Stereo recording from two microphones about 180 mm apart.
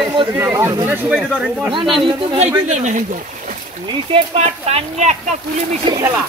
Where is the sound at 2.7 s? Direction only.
40° right (ahead or behind).